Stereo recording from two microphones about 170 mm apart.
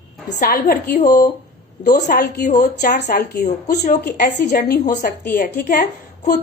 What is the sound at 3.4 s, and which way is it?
Speech, 50° left (ahead or behind).